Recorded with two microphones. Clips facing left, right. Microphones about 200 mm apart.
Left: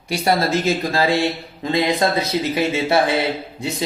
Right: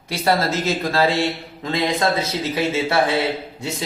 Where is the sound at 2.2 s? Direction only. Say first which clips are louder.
Left 3 dB; 15° left (ahead or behind).